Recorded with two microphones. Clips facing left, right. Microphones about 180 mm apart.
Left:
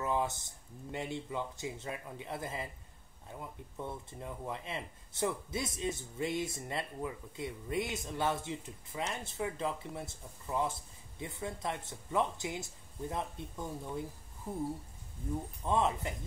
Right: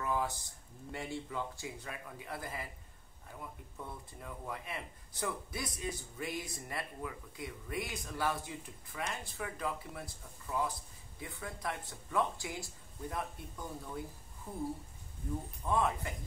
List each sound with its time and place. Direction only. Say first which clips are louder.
0.0 s a sound: left 2 dB; 20° left (ahead or behind)
0.9 s speech: left 2 dB; 20° left (ahead or behind)
15.6 s speech: left 1 dB; 20° left (ahead or behind)